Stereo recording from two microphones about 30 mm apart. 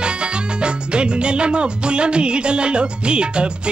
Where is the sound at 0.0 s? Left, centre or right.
Right.